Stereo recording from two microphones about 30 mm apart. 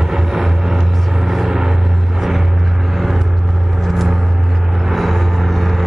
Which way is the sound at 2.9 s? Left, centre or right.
Centre.